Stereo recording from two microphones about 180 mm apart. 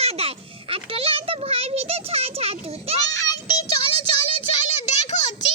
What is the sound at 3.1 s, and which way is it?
Child singing, 20° left (ahead or behind).